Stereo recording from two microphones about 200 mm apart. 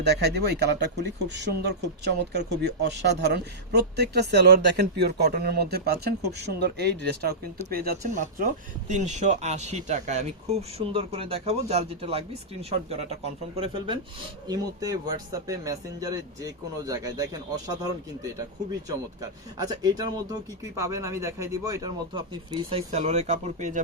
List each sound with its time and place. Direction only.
0.0 s speech: 55° right (ahead or behind)
7.6 s speech: 40° right (ahead or behind)
13.6 s speech: 25° right (ahead or behind)
19.5 s speech: 20° right (ahead or behind)
22.9 s speech: 35° right (ahead or behind)